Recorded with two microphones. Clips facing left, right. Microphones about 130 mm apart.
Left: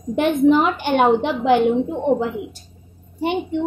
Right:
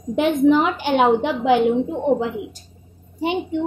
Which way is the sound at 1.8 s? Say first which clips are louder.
Even; centre (ahead or behind).